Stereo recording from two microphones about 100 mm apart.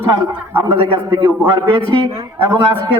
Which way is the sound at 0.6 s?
55° right (ahead or behind).